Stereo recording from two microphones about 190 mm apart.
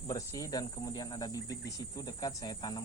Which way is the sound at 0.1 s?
15° left (ahead or behind).